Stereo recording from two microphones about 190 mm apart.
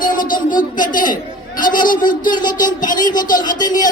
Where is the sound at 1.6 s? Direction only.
45° left (ahead or behind).